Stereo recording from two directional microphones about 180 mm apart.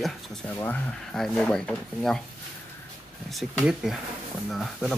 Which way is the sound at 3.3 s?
Centre (ahead or behind).